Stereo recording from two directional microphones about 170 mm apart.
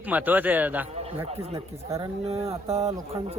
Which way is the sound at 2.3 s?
35° right (ahead or behind).